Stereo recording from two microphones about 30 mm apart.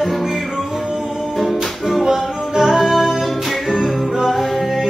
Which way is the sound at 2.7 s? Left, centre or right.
Centre.